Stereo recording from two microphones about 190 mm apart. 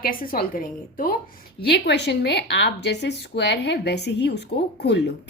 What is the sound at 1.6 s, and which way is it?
Speech, 60° left (ahead or behind).